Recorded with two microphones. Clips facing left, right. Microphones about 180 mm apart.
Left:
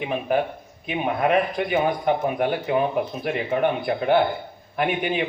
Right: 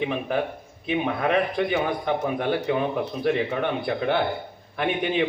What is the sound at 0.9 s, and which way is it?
A man's voice, 15° left (ahead or behind).